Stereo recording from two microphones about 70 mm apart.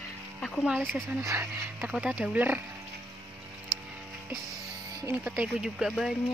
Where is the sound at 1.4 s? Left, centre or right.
Right.